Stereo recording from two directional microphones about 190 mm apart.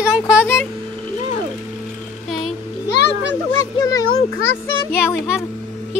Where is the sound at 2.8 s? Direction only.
65° left (ahead or behind).